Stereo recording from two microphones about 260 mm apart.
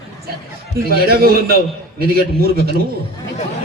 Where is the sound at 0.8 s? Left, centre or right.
Right.